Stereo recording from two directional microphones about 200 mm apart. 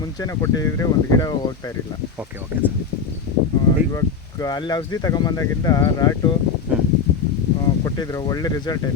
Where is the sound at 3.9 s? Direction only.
20° left (ahead or behind).